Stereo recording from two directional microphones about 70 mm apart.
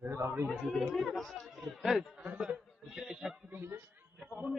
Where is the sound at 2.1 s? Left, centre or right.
Centre.